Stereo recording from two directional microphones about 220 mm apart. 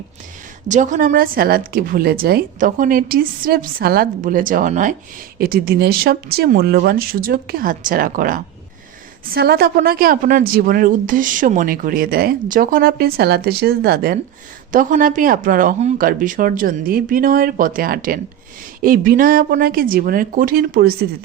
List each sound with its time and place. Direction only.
0.7 s a woman's voice: 35° right (ahead or behind)